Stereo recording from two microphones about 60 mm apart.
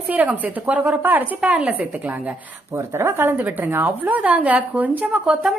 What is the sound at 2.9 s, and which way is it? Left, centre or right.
Speech, right.